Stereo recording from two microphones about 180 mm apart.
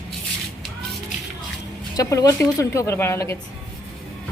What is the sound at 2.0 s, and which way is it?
A woman's voice, 20° left (ahead or behind).